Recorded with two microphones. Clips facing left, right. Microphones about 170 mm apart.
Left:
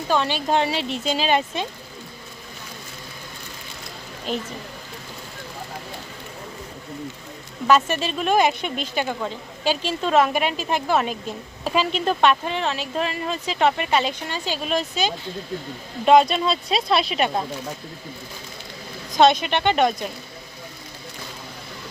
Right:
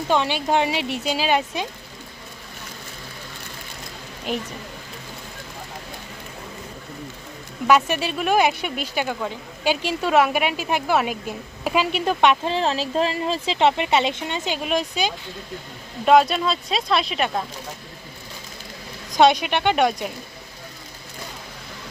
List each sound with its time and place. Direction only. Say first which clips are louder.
0.1 s speech: even; 15° right (ahead or behind)
4.3 s speech: even; 15° right (ahead or behind)
7.7 s speech: even; 10° right (ahead or behind)
12.5 s a woman's voice: right 3 dB; 35° right (ahead or behind); by 15.1 s 15° right (ahead or behind)
16.0 s speech: left 1 dB; 5° right (ahead or behind)
19.1 s speech: even; 10° right (ahead or behind)